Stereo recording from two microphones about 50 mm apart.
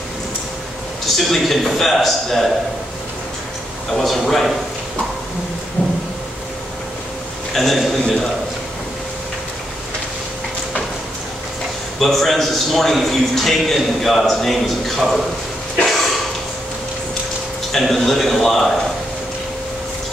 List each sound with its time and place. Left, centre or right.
1.0 s a man's voice: centre
3.9 s a man's voice: centre
5.8 s a sound: left
7.5 s a man's voice: centre
12.0 s a man's voice: centre
15.8 s a sound: centre
17.6 s a man's voice: centre